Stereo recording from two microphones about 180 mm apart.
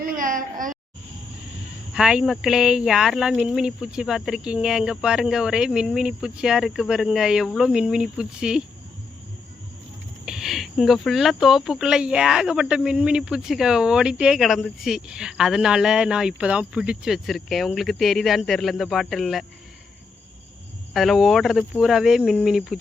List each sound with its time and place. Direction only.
0.0 s a sound: 50° right (ahead or behind)
1.9 s speech: 5° right (ahead or behind)
10.2 s speech: centre (ahead or behind)
20.9 s speech: centre (ahead or behind)